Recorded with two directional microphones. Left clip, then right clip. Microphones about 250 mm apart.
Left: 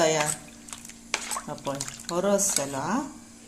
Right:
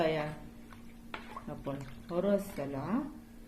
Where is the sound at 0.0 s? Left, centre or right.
Left.